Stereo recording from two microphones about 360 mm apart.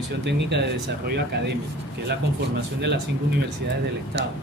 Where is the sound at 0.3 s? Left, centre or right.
Right.